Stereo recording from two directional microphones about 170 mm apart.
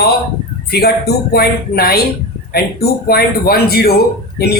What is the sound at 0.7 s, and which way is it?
A man's voice, 70° left (ahead or behind).